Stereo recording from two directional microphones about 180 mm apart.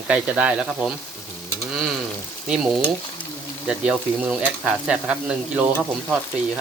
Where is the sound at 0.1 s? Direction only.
5° right (ahead or behind).